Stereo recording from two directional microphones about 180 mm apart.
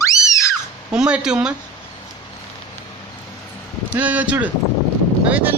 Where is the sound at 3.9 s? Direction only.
10° right (ahead or behind).